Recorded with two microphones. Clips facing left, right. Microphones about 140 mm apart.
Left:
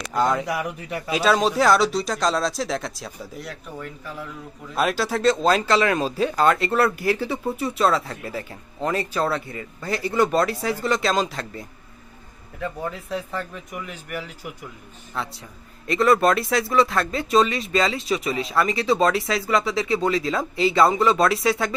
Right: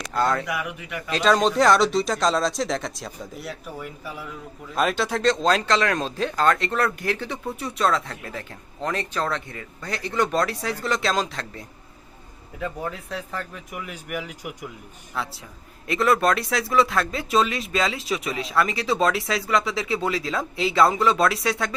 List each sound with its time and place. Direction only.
0.1 s speech: 15° left (ahead or behind)
0.4 s a man's voice: 35° left (ahead or behind)
1.1 s speech: 5° left (ahead or behind)
4.7 s speech: centre (ahead or behind)